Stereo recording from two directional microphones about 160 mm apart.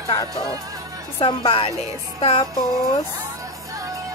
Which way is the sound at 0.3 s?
20° right (ahead or behind).